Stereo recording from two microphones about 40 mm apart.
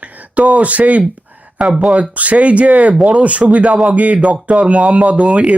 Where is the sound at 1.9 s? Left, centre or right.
Right.